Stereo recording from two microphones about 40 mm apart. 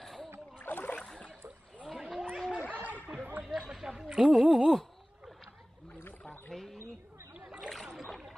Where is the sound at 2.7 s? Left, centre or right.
Right.